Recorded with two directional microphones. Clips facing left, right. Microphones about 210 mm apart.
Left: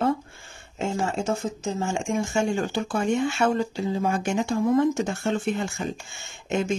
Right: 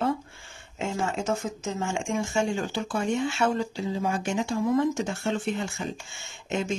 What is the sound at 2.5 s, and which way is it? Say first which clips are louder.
Speech: left 3 dB; 50° left (ahead or behind).